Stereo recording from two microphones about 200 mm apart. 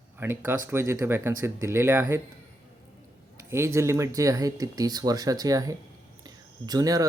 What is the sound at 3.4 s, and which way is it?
Speech, 15° right (ahead or behind).